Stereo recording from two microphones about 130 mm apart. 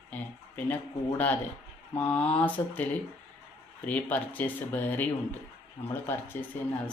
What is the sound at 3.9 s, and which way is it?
Speech, 10° left (ahead or behind).